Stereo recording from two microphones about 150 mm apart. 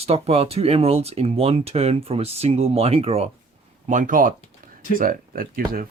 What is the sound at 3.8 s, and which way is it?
Speech, 55° right (ahead or behind).